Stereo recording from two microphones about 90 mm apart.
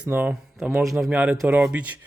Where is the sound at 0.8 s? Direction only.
Centre (ahead or behind).